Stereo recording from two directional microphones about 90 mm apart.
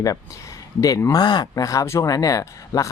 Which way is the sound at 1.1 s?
50° left (ahead or behind).